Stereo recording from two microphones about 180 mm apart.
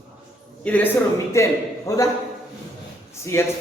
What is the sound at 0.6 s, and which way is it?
Speech, 10° left (ahead or behind).